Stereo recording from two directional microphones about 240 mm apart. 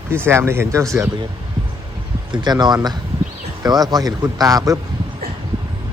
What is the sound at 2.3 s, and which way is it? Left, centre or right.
Speech, centre.